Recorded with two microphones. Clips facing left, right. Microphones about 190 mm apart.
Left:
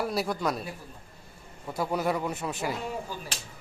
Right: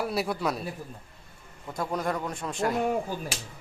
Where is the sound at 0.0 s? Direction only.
Centre (ahead or behind).